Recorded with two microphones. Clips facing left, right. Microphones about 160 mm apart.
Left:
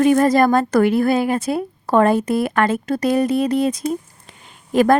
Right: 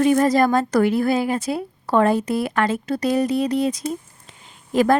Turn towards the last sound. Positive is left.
turn(degrees=55)  # may be behind; listen again after turning